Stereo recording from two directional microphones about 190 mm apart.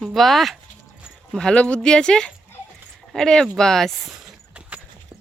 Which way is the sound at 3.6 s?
Centre (ahead or behind).